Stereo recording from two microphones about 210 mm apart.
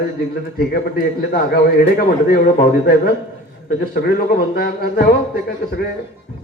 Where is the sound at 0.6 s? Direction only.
45° left (ahead or behind).